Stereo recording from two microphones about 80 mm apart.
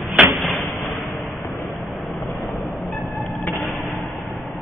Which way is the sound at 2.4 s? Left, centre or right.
Centre.